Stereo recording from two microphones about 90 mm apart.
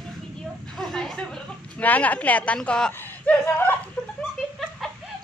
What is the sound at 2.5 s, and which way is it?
Speech, 10° left (ahead or behind).